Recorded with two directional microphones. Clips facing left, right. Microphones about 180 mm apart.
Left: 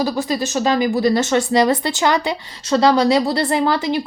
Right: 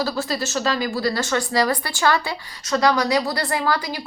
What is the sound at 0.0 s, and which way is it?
Speech, 15° left (ahead or behind).